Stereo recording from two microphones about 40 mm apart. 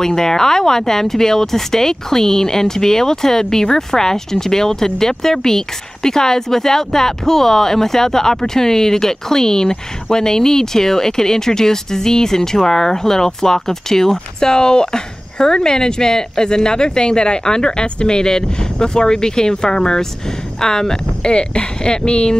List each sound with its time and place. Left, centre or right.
0.0 s speech: centre